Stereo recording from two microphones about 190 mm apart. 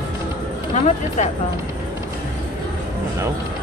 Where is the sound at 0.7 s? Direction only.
35° left (ahead or behind).